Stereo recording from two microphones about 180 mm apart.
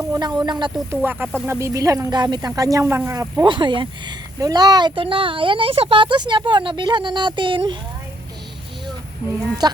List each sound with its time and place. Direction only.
0.1 s speech: 25° right (ahead or behind)
9.6 s speech: 25° right (ahead or behind)